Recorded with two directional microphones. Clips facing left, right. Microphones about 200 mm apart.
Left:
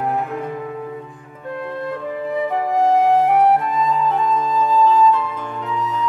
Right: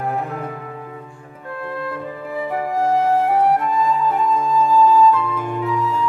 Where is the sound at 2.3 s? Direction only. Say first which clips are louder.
Left 2 dB; 20° left (ahead or behind).